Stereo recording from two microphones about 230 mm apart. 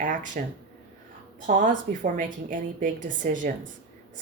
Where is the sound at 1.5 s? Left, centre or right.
Right.